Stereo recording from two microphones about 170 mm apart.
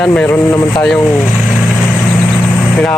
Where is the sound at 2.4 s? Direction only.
10° left (ahead or behind).